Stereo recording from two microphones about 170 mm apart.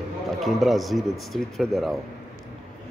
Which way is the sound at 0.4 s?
Centre (ahead or behind).